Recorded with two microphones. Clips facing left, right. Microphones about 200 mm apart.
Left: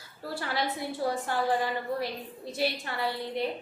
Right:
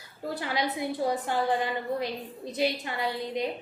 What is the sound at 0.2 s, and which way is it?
A woman's voice, 15° right (ahead or behind).